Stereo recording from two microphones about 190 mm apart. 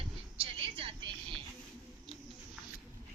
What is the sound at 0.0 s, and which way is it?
Vehicle, 30° right (ahead or behind).